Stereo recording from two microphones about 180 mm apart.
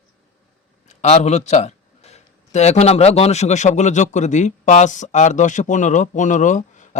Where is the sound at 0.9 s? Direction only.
40° left (ahead or behind).